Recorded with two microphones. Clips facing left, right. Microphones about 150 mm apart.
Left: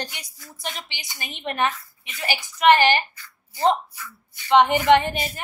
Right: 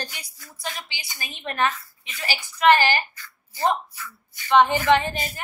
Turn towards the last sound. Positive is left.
turn(degrees=20)  # may be behind; listen again after turning